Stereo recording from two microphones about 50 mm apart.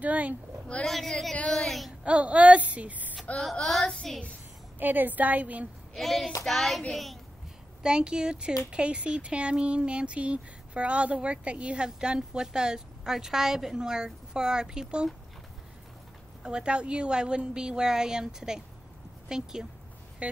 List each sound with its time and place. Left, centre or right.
0.0 s a woman's voice: right
0.8 s a woman's voice: centre
2.0 s speech: right
3.3 s a woman's voice: centre
3.8 s child singing: centre
4.7 s a woman's voice: right
5.9 s a woman's voice: centre
7.8 s speech: centre
16.4 s speech: centre